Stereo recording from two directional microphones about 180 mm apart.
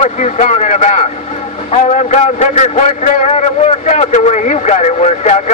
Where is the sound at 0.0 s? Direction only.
45° left (ahead or behind).